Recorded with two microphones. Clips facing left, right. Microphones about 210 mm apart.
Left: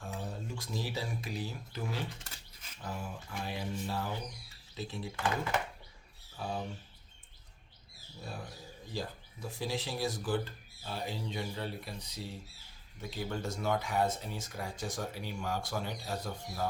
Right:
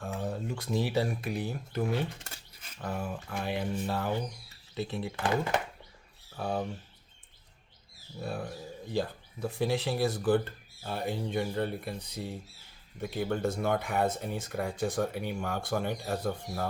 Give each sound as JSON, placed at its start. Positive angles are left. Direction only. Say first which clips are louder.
{"t": 0.0, "sound": "speech", "louder": "right 6 dB", "side_deg": -60}
{"t": 6.3, "sound": "speech", "louder": "right 6 dB", "side_deg": -55}
{"t": 8.2, "sound": "speech", "louder": "right 8 dB", "side_deg": -60}